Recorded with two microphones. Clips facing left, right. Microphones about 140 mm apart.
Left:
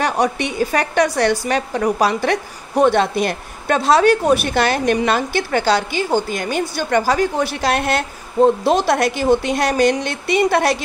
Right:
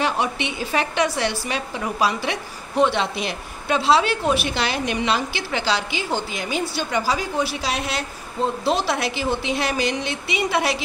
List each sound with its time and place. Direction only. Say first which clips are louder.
0.0 s a woman's voice: left 5 dB; 45° left (ahead or behind)